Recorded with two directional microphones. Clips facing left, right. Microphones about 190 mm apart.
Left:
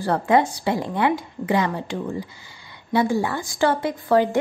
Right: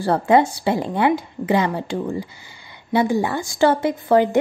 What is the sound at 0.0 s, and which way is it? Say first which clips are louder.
A woman's voice: right 3 dB; 30° right (ahead or behind).